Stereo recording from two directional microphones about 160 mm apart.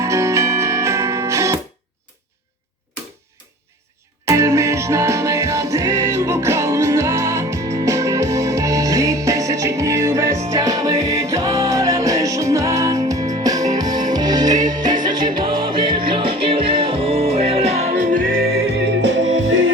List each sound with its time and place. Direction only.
0.0 s music: 20° right (ahead or behind)
4.3 s music: 20° right (ahead or behind); by 18.6 s 70° right (ahead or behind)